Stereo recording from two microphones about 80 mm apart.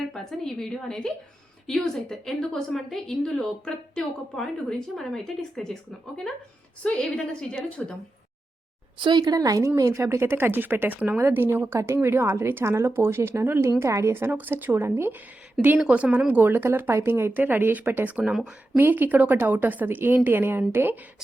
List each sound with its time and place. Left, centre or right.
0.1 s a woman's voice: centre
6.8 s a woman's voice: centre
9.0 s speech: right
9.2 s speech: right
11.2 s speech: right
15.9 s speech: centre
18.2 s speech: centre
18.8 s speech: right